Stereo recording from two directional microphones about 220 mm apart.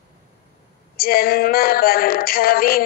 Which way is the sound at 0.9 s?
40° left (ahead or behind).